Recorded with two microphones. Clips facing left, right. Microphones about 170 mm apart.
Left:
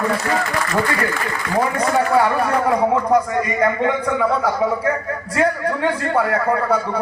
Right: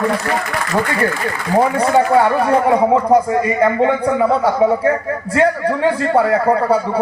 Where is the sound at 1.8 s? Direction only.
25° right (ahead or behind).